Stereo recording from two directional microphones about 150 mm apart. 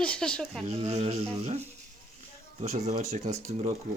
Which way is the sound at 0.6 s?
50° right (ahead or behind).